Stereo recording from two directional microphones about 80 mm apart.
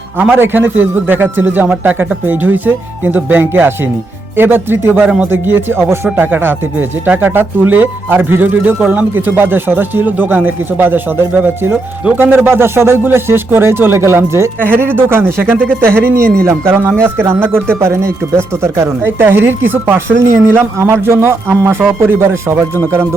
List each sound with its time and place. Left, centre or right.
0.3 s speech: right
5.0 s speech: centre
5.3 s speech: right